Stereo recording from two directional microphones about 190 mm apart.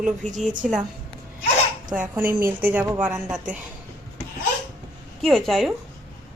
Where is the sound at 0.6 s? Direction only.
Centre (ahead or behind).